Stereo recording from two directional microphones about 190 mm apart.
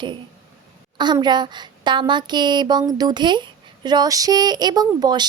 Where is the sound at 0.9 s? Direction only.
25° right (ahead or behind).